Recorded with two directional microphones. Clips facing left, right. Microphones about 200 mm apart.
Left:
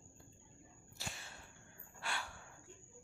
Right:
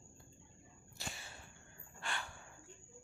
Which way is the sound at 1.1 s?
Centre (ahead or behind).